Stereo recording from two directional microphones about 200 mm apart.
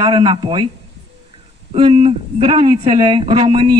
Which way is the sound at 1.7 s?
25° right (ahead or behind).